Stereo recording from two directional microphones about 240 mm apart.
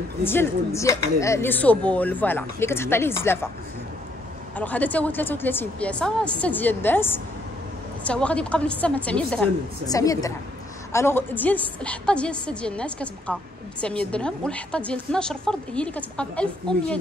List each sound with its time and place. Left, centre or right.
0.2 s speech: centre
4.6 s a woman's voice: centre